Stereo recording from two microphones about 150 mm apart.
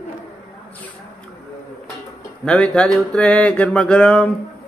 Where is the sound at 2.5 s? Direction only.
5° left (ahead or behind).